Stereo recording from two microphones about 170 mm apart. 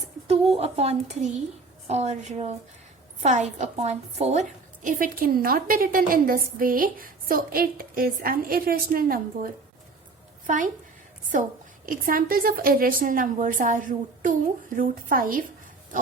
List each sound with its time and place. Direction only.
0.5 s a woman's voice: 40° right (ahead or behind)
11.9 s a woman's voice: 55° right (ahead or behind)